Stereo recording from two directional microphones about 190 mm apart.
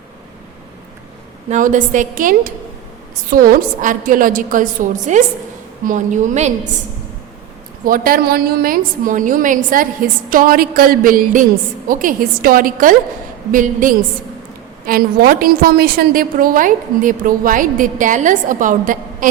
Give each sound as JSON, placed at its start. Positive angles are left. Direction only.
{"t": 1.5, "sound": "a woman's voice", "side_deg": -40}
{"t": 7.9, "sound": "a woman's voice", "side_deg": -50}